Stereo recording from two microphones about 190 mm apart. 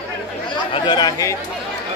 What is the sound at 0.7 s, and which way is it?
Speech, 20° left (ahead or behind).